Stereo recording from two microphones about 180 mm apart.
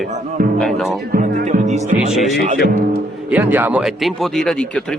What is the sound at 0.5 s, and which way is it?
Speech, centre (ahead or behind).